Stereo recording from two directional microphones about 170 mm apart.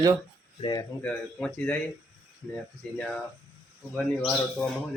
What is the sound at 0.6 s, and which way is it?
Speech, 25° left (ahead or behind).